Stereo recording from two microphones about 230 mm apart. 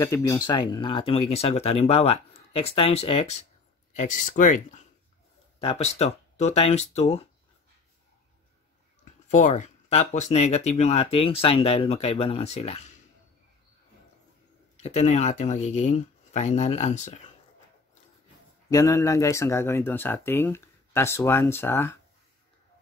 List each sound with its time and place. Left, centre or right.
0.0 s speech: centre; by 7.2 s left
9.3 s speech: left
14.8 s speech: left
18.7 s speech: centre